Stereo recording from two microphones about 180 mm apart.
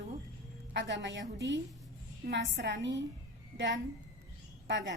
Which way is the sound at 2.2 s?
80° right.